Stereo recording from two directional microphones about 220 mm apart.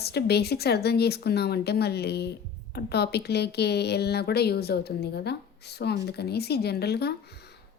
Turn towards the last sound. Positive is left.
turn(degrees=45)  # may be behind; listen again after turning